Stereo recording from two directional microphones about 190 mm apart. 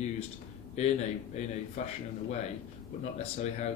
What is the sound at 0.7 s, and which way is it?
Speech, 35° left (ahead or behind).